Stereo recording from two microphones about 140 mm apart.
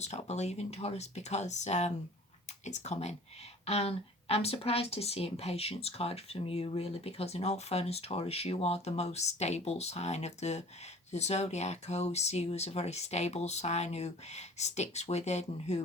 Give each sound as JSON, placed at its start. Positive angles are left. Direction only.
{"t": 0.0, "sound": "speech", "side_deg": 55}